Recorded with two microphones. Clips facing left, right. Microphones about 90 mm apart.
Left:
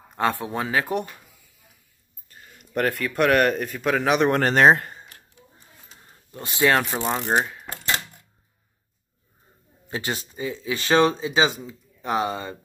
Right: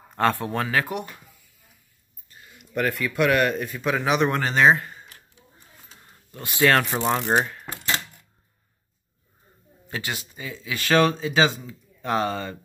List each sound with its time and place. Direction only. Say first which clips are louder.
0.1 s speech: right 1 dB; 15° left (ahead or behind)
2.2 s speech: even; 40° left (ahead or behind)
6.3 s speech: even; 25° left (ahead or behind)
7.1 s speech: right 1 dB; centre (ahead or behind)
9.8 s speech: left 3 dB; 30° left (ahead or behind)